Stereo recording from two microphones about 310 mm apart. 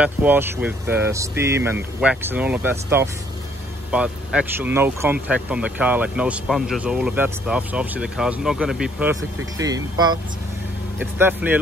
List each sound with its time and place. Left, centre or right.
0.0 s speech: centre